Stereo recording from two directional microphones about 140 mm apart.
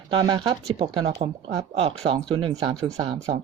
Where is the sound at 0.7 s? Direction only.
45° right (ahead or behind).